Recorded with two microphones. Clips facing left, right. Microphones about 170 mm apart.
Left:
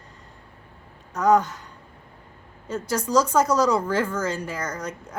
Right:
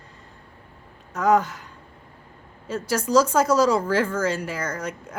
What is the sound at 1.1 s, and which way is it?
Speech, 5° right (ahead or behind).